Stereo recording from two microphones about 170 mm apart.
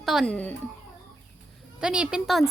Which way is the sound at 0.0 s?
Centre (ahead or behind).